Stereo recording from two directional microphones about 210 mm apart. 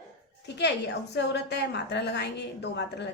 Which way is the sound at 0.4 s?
55° left (ahead or behind).